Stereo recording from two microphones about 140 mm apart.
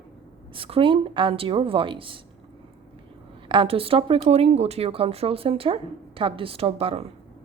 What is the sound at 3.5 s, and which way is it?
Speech, 40° right (ahead or behind).